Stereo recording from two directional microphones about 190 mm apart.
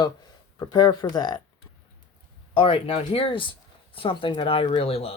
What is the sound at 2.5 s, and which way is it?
Speech, 25° left (ahead or behind).